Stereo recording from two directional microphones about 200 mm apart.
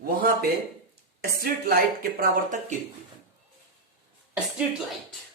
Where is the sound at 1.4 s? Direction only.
50° right (ahead or behind).